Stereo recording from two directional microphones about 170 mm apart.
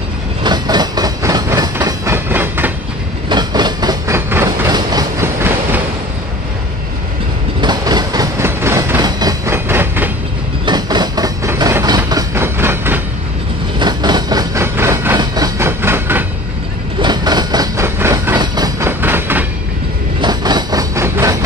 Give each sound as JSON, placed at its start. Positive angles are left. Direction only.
{"t": 0.4, "sound": "train", "side_deg": -25}
{"t": 3.3, "sound": "train", "side_deg": -25}
{"t": 7.6, "sound": "train", "side_deg": -25}
{"t": 10.6, "sound": "vehicle", "side_deg": -25}
{"t": 12.1, "sound": "train", "side_deg": -15}
{"t": 13.7, "sound": "a sound", "side_deg": -25}
{"t": 15.1, "sound": "train", "side_deg": -20}
{"t": 17.0, "sound": "vehicle", "side_deg": -25}
{"t": 20.2, "sound": "train", "side_deg": -25}